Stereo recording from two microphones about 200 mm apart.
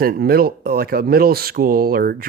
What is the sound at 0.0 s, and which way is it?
Speech, 50° right (ahead or behind).